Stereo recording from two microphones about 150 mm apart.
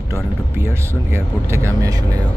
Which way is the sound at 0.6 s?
15° right (ahead or behind).